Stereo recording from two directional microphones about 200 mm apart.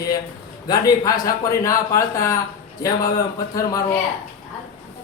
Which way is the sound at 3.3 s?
15° left (ahead or behind).